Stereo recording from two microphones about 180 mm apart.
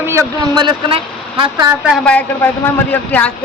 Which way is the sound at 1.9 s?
5° left (ahead or behind).